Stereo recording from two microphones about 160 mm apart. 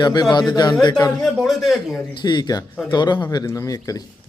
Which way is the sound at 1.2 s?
Centre (ahead or behind).